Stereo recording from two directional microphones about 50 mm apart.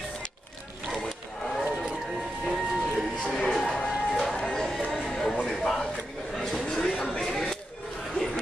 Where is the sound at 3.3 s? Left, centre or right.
Centre.